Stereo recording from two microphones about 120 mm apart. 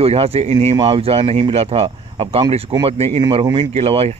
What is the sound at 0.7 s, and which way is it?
Speech, 45° right (ahead or behind).